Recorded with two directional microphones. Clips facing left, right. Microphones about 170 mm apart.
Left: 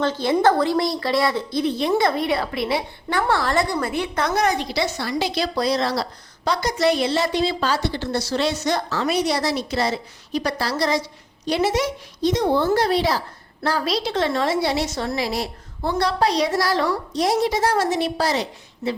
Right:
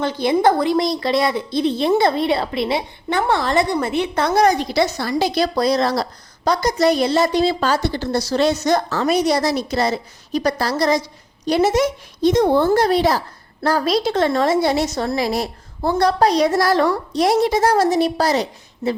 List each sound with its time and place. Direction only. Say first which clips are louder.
0.0 s a woman's voice: right 2 dB; 15° right (ahead or behind); by 18.4 s 40° right (ahead or behind)